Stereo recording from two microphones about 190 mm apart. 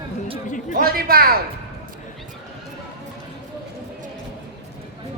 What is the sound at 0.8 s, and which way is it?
Speech, 50° right (ahead or behind).